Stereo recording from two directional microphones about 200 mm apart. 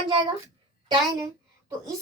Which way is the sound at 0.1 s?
25° right (ahead or behind).